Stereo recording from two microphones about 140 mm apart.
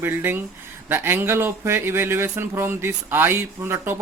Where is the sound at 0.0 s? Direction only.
15° right (ahead or behind).